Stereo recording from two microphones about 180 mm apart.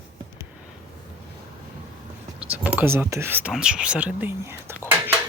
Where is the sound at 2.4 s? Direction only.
10° right (ahead or behind).